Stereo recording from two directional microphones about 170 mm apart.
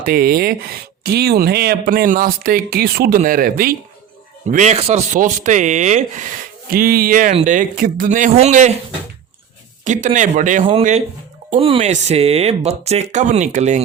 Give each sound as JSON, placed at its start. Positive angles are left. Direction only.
{"t": 0.0, "sound": "speech", "side_deg": -65}
{"t": 4.4, "sound": "speech", "side_deg": -45}
{"t": 6.7, "sound": "speech", "side_deg": -60}
{"t": 9.8, "sound": "speech", "side_deg": -45}
{"t": 10.7, "sound": "speech", "side_deg": -35}